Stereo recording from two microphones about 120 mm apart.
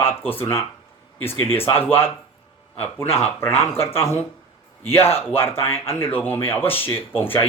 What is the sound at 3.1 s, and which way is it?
A man's voice, 15° left (ahead or behind).